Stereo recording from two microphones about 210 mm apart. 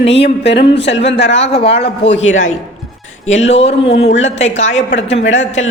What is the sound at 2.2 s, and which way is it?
Speech, 65° left (ahead or behind).